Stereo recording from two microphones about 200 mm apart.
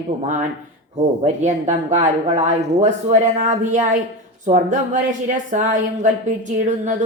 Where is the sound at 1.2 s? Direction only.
35° right (ahead or behind).